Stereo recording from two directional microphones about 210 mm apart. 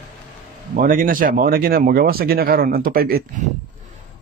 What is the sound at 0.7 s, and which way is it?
A man's voice, 40° right (ahead or behind).